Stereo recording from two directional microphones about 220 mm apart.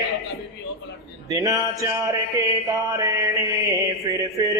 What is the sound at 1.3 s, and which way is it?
Mantra, 15° right (ahead or behind).